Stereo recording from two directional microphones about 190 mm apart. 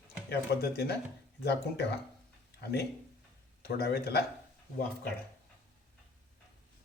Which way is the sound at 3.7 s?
55° left (ahead or behind).